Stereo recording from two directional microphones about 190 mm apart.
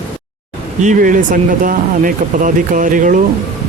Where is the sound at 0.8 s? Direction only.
40° right (ahead or behind).